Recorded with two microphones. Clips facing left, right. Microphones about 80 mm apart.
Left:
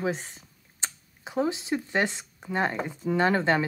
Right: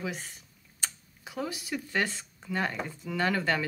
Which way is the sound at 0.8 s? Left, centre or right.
Left.